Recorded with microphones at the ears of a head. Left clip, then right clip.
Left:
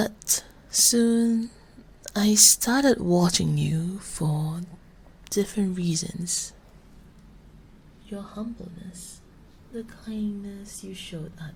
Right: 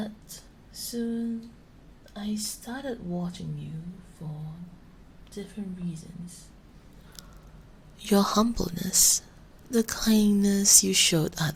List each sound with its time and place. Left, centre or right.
0.0 s a sound: left
2.0 s speech: left
8.0 s speech: right